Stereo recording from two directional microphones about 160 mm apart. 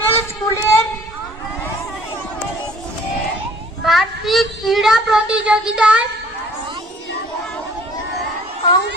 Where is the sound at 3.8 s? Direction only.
Centre (ahead or behind).